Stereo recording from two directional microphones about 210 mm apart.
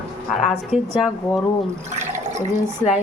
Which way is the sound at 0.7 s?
5° right (ahead or behind).